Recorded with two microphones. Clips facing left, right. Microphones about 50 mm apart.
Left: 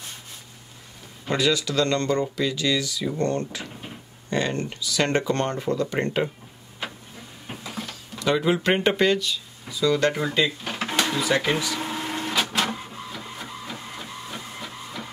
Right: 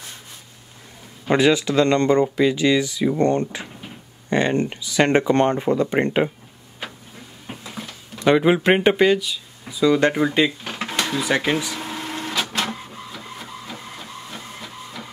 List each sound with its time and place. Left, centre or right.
1.3 s speech: right
8.2 s speech: right; by 9.8 s centre
9.8 s speech: right
10.6 s drawer open or close: centre
11.1 s speech: right
11.8 s printer: centre